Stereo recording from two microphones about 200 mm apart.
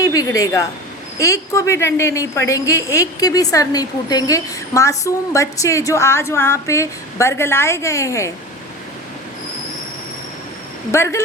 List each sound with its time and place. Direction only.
0.0 s a woman's voice: 20° left (ahead or behind)
10.9 s a woman's voice: 15° left (ahead or behind)